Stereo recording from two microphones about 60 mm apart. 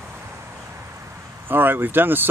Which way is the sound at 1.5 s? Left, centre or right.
Right.